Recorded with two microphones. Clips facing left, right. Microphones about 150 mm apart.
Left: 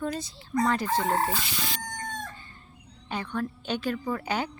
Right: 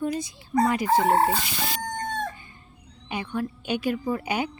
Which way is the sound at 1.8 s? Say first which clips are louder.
Right 7 dB; 60° right (ahead or behind).